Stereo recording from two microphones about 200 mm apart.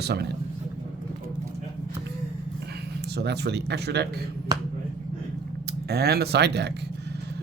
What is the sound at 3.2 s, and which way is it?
Speech, 55° right (ahead or behind).